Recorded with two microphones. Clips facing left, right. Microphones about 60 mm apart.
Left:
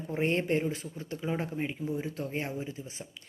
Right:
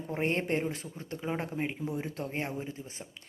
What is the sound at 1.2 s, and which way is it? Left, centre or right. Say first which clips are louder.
Speech: left 1 dB; right.